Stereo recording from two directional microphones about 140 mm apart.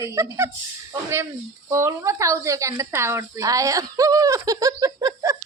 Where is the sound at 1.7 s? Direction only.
20° right (ahead or behind).